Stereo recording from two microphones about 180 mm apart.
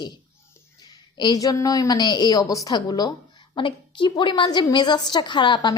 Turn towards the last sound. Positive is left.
turn(degrees=25)  # may be behind; listen again after turning